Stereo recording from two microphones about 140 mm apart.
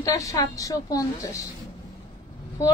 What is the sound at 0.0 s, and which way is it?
A woman's voice, 25° left (ahead or behind).